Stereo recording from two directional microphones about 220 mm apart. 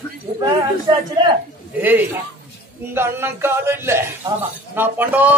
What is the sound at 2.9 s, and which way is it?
A man's voice, 10° right (ahead or behind).